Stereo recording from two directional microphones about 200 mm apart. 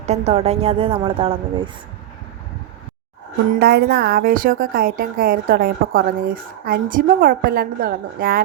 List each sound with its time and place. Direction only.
0.0 s speech: 35° right (ahead or behind)
3.6 s a woman's voice: 50° right (ahead or behind)